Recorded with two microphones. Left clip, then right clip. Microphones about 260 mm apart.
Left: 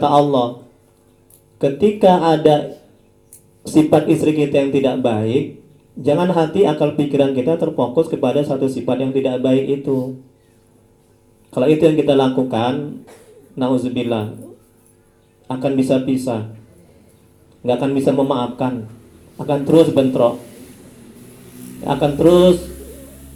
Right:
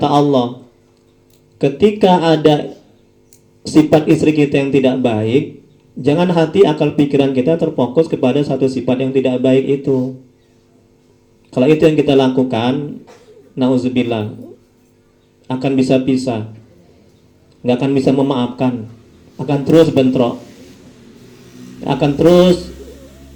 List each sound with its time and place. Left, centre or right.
0.0 s speech: right
1.5 s speech: right
3.6 s speech: right
11.5 s speech: right
15.4 s speech: right
17.6 s speech: right
21.8 s speech: right